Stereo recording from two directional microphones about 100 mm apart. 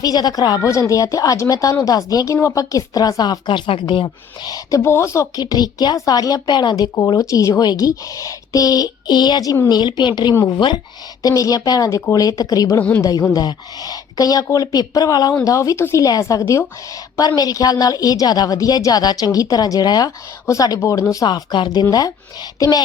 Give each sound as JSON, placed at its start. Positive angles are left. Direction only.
{"t": 0.0, "sound": "speech", "side_deg": 40}
{"t": 5.4, "sound": "a woman's voice", "side_deg": 40}
{"t": 11.2, "sound": "speech", "side_deg": 35}
{"t": 17.2, "sound": "speech", "side_deg": 40}